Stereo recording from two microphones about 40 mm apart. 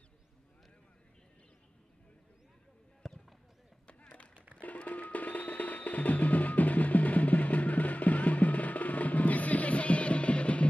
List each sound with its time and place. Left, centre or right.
3.0 s fireworks: centre
3.8 s a sound: left
4.6 s music: left